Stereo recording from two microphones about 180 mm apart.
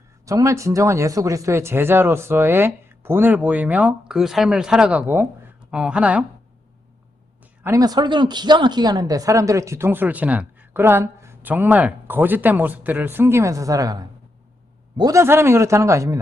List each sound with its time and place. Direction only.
0.3 s a woman's voice: 15° right (ahead or behind)
7.6 s a woman's voice: 20° right (ahead or behind)